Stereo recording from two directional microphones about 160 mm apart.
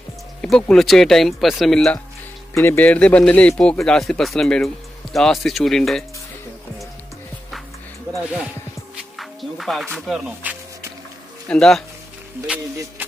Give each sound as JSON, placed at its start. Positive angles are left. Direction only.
{"t": 0.4, "sound": "speech", "side_deg": 5}
{"t": 2.5, "sound": "speech", "side_deg": 15}
{"t": 8.2, "sound": "speech", "side_deg": -5}
{"t": 8.9, "sound": "music", "side_deg": 0}
{"t": 9.9, "sound": "speech", "side_deg": -5}
{"t": 11.4, "sound": "speech", "side_deg": 5}